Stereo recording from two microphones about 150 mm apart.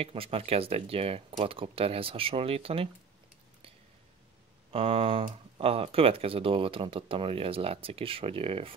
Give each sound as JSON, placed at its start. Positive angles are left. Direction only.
{"t": 0.0, "sound": "speech", "side_deg": -40}
{"t": 4.7, "sound": "speech", "side_deg": -40}